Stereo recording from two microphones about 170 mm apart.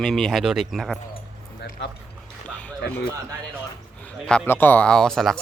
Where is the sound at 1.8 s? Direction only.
85° left.